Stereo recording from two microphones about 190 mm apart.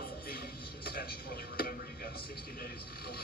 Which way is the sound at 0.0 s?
55° left (ahead or behind).